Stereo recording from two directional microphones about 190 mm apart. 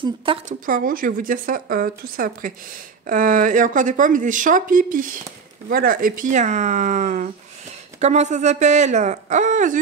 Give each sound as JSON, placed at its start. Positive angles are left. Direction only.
{"t": 0.0, "sound": "a woman's voice", "side_deg": -25}
{"t": 0.5, "sound": "speech", "side_deg": -45}